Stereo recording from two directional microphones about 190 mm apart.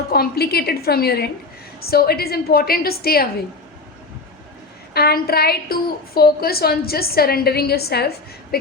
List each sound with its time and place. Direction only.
0.1 s a woman's voice: 55° left (ahead or behind)
4.9 s a woman's voice: 55° left (ahead or behind)